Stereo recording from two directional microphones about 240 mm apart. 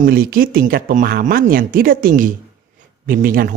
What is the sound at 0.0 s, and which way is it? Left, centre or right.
Speech, right.